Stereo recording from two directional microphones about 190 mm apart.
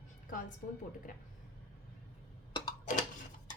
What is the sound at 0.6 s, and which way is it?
Speech, 40° left (ahead or behind).